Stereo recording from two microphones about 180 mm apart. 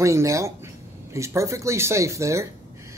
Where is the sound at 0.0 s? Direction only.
15° right (ahead or behind).